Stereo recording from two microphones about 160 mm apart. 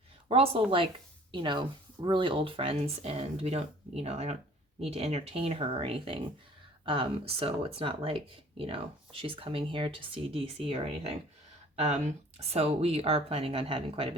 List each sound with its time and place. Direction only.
0.3 s speech: 35° right (ahead or behind)